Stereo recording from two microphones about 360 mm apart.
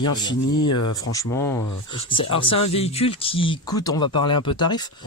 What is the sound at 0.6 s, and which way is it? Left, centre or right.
Speech, left.